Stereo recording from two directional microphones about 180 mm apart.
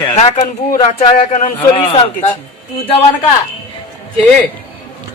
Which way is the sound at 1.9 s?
30° left (ahead or behind).